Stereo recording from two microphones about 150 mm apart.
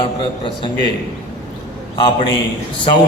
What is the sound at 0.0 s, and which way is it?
Speech, 35° left (ahead or behind).